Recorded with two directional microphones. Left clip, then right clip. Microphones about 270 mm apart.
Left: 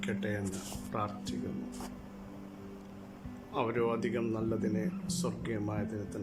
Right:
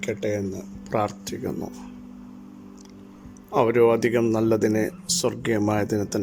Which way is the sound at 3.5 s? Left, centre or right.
Right.